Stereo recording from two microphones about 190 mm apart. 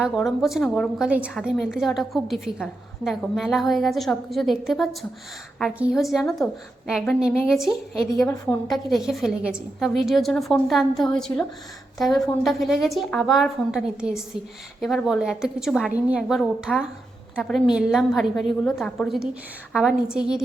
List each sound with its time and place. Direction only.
0.0 s a woman's voice: centre (ahead or behind)
8.1 s a woman's voice: 15° left (ahead or behind)
8.4 s a woman's voice: centre (ahead or behind)